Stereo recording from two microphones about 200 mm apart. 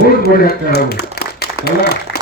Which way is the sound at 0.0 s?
50° left (ahead or behind).